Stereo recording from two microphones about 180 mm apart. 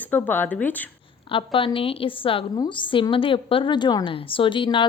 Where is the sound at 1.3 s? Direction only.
30° left (ahead or behind).